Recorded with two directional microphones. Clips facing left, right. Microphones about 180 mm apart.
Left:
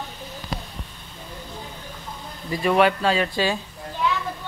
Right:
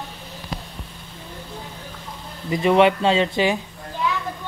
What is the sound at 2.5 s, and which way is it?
Speech, 20° right (ahead or behind).